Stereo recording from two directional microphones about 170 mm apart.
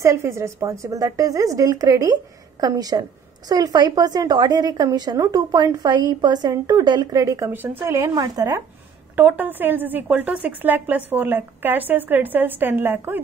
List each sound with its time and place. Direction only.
0.0 s a woman's voice: 15° right (ahead or behind)